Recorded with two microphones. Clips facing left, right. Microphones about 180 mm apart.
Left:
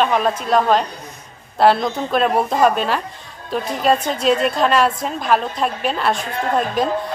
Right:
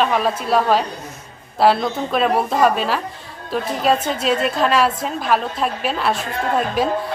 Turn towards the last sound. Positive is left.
turn(degrees=-5)  # may be behind; listen again after turning